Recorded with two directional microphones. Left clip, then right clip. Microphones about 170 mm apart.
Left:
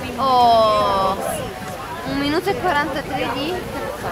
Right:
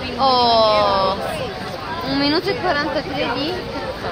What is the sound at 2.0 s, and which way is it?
Speech, 15° right (ahead or behind).